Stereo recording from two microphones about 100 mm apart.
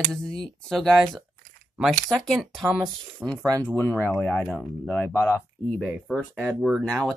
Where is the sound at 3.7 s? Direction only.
20° left (ahead or behind).